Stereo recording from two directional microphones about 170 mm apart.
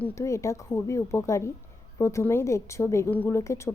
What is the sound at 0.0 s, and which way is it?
A woman's voice, 15° left (ahead or behind).